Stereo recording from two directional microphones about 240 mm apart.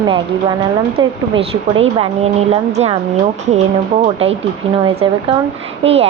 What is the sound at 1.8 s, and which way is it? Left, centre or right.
A woman's voice, right.